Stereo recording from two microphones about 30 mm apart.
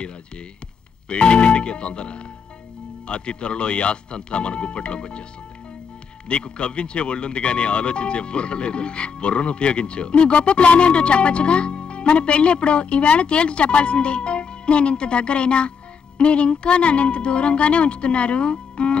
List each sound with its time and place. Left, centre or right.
1.0 s speech: left
6.2 s speech: left